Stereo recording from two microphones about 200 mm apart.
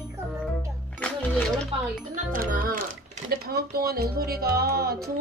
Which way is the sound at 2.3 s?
45° right (ahead or behind).